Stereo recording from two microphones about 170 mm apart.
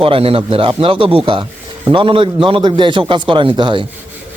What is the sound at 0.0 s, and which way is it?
A man's voice, 35° right (ahead or behind).